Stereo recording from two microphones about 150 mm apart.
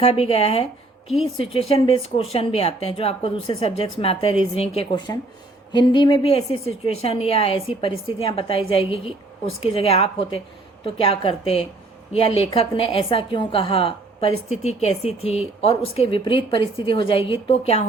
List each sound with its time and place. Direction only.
0.0 s a woman's voice: 40° left (ahead or behind)